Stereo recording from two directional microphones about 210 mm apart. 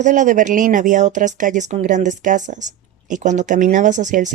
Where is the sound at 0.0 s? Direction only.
35° right (ahead or behind).